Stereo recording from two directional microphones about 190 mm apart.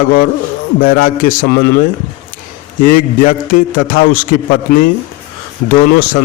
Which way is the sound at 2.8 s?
45° left (ahead or behind).